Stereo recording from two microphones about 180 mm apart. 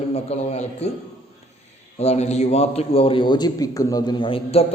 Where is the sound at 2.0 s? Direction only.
35° left (ahead or behind).